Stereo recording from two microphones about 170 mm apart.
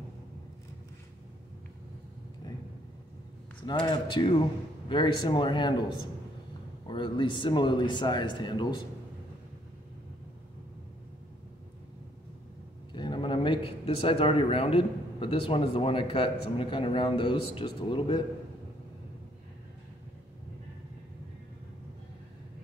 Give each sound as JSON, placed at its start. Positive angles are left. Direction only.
{"t": 3.8, "sound": "speech", "side_deg": 25}
{"t": 6.9, "sound": "speech", "side_deg": 30}
{"t": 12.9, "sound": "a man's voice", "side_deg": 25}